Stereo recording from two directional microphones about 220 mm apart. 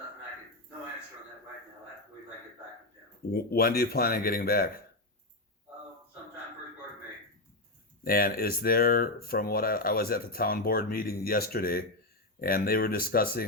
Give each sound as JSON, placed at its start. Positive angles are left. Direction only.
{"t": 3.3, "sound": "speech", "side_deg": 45}
{"t": 8.0, "sound": "speech", "side_deg": 40}